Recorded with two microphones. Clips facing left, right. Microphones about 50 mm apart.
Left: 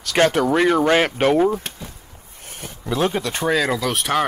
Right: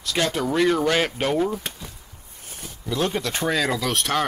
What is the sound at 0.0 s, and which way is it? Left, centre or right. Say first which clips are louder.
Speech: left 7 dB; left.